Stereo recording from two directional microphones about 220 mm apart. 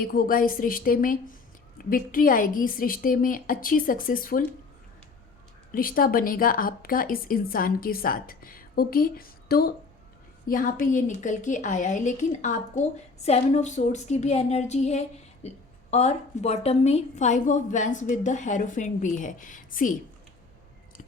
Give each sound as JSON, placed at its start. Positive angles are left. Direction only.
{"t": 0.0, "sound": "a woman's voice", "side_deg": 40}
{"t": 5.7, "sound": "a woman's voice", "side_deg": 40}